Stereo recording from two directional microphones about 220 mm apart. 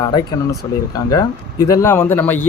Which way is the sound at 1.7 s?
15° left (ahead or behind).